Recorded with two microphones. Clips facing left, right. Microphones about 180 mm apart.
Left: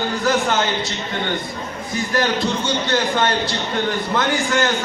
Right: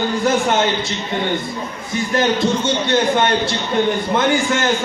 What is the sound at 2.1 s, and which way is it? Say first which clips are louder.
A man's voice: right 4 dB; 25° right (ahead or behind).